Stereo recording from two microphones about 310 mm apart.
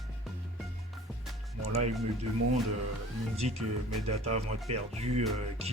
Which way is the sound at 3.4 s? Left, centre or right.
Centre.